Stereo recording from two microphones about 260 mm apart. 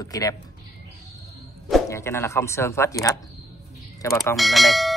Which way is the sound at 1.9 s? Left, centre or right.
Centre.